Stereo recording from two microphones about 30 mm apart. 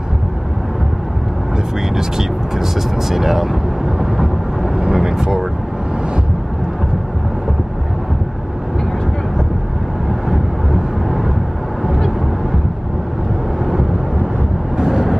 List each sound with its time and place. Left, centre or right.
2.0 s speech: centre
4.7 s vehicle: centre
10.2 s vehicle: centre
14.8 s vehicle: centre